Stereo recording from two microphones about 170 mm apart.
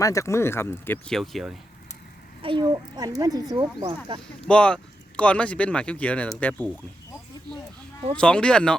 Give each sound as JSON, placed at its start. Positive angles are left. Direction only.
{"t": 0.0, "sound": "speech", "side_deg": 20}
{"t": 2.4, "sound": "a child's voice", "side_deg": -30}
{"t": 4.4, "sound": "speech", "side_deg": 5}
{"t": 8.1, "sound": "speech", "side_deg": 5}